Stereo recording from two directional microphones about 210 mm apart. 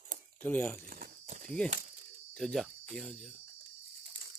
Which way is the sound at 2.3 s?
Centre (ahead or behind).